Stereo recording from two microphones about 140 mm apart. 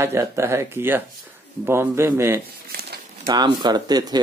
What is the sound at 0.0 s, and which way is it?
Speech, 20° right (ahead or behind).